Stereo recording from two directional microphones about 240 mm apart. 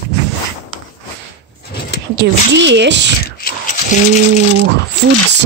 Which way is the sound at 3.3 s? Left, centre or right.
Left.